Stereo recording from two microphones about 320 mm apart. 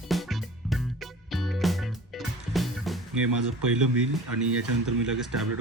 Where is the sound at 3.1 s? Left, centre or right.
Right.